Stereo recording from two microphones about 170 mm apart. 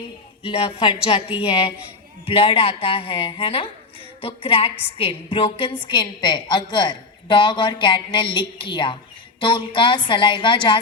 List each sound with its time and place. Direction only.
0.4 s a woman's voice: 35° left (ahead or behind)